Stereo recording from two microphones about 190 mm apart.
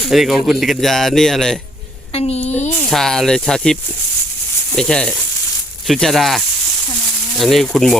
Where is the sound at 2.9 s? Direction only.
Centre (ahead or behind).